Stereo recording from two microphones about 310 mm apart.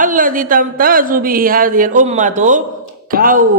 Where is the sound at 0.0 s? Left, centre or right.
Right.